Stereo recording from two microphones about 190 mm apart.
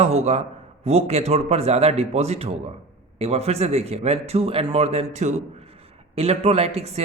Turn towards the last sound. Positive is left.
turn(degrees=-35)  # may be behind; listen again after turning